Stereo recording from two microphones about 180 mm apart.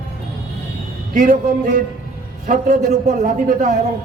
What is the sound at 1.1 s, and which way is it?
A man's voice, 45° right (ahead or behind).